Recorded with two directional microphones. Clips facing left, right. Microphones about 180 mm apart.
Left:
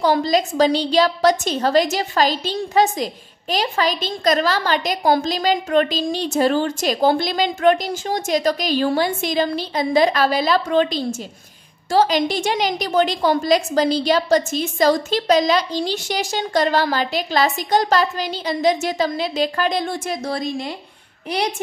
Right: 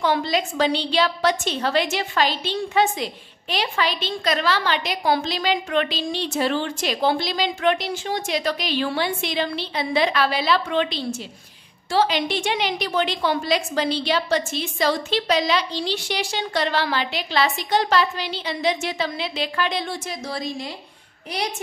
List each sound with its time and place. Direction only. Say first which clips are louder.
0.0 s a woman's voice: left 4 dB; 40° left (ahead or behind); by 20.7 s 55° left (ahead or behind)